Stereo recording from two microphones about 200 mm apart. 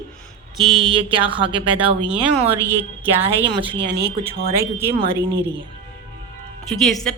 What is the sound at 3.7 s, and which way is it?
Speech, 60° right (ahead or behind).